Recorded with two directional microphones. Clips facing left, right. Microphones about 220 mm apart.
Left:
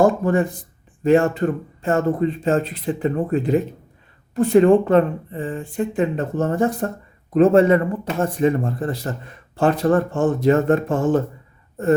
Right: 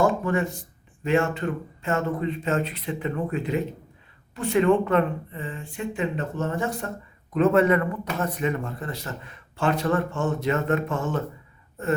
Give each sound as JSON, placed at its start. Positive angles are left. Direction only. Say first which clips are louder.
{"t": 0.0, "sound": "speech", "louder": "left 6 dB", "side_deg": 35}